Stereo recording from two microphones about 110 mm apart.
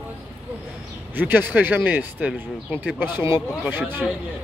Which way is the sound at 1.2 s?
15° right (ahead or behind).